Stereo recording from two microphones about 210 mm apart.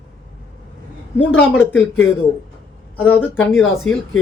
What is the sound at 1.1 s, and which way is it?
Speech, 5° left (ahead or behind).